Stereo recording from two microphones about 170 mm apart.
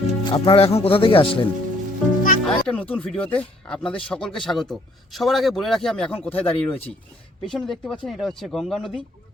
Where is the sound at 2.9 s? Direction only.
10° left (ahead or behind).